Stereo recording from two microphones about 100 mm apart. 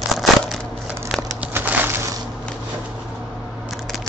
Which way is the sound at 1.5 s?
25° right (ahead or behind).